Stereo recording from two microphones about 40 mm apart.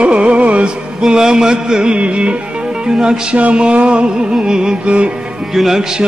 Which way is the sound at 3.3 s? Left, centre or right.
Right.